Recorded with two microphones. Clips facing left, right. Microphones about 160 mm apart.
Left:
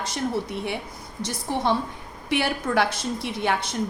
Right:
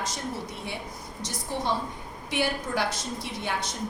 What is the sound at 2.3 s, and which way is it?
Speech, 65° left (ahead or behind).